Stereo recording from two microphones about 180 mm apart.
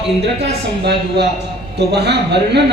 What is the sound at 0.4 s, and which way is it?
A man's voice, 65° right (ahead or behind).